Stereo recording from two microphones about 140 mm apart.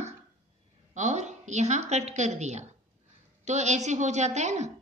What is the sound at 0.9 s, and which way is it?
A woman's voice, 55° right (ahead or behind).